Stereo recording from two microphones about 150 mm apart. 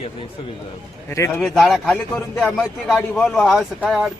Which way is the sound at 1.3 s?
Centre (ahead or behind).